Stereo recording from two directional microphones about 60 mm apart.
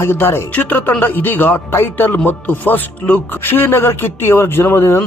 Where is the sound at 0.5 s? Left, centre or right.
Left.